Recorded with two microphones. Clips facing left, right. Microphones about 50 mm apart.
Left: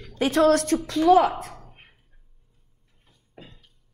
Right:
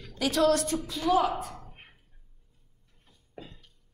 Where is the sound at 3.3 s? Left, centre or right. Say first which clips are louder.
Right 1 dB; left.